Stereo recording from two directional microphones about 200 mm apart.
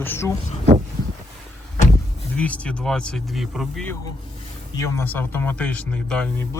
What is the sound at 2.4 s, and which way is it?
Speech, 5° left (ahead or behind).